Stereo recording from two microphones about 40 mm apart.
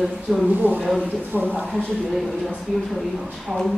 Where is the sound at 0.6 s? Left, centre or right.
Right.